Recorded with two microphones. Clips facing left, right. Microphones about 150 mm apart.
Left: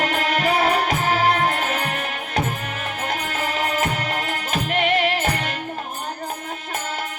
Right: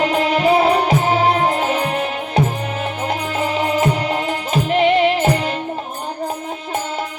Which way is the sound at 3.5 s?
35° right (ahead or behind).